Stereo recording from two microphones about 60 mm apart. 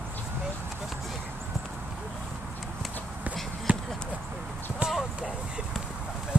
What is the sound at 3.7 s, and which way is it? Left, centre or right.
Basketball bounce, right.